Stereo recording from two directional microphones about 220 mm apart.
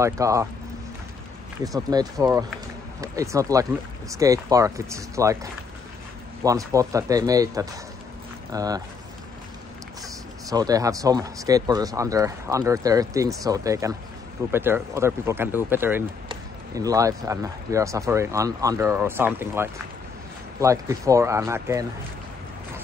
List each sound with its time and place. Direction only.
0.0 s speech: 15° right (ahead or behind)
1.6 s speech: 15° right (ahead or behind)
10.5 s speech: 15° right (ahead or behind)